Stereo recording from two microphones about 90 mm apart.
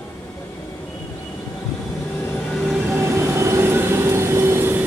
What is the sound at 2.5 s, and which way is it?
Train, 5° left (ahead or behind).